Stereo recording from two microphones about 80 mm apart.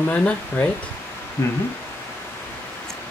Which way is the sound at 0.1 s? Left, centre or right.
Centre.